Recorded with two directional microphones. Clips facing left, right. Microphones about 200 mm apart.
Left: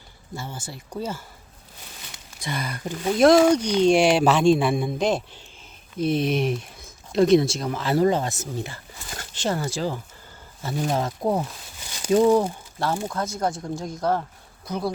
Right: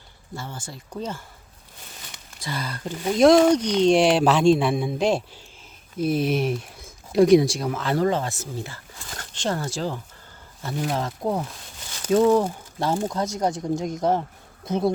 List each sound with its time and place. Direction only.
0.3 s speech: 10° left (ahead or behind)
2.4 s speech: 20° left (ahead or behind)
3.1 s speech: centre (ahead or behind); by 7.7 s 15° right (ahead or behind)
7.7 s speech: 5° left (ahead or behind)
11.9 s a sound: 15° left (ahead or behind)
12.5 s speech: 20° right (ahead or behind)